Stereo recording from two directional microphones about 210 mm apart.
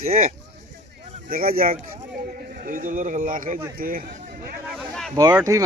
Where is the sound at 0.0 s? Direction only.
30° right (ahead or behind).